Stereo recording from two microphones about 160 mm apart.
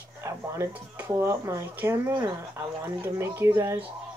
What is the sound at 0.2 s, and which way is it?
Speech, 15° right (ahead or behind).